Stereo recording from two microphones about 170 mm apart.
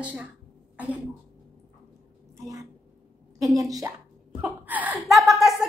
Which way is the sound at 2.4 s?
20° right (ahead or behind).